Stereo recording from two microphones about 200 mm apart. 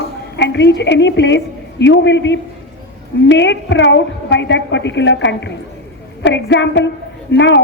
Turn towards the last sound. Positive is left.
turn(degrees=60)  # may be behind; listen again after turning